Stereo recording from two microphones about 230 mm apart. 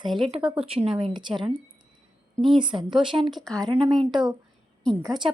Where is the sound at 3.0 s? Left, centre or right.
Right.